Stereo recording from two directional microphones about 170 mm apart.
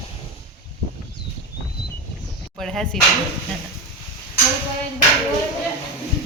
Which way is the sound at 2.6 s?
Centre (ahead or behind).